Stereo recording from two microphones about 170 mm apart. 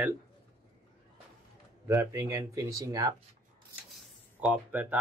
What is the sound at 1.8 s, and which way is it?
A man's voice, 15° right (ahead or behind).